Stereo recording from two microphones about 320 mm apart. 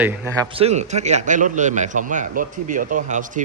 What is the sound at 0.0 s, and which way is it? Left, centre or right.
A man's voice, centre.